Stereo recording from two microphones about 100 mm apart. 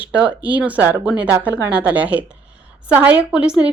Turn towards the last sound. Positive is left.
turn(degrees=-10)  # may be behind; listen again after turning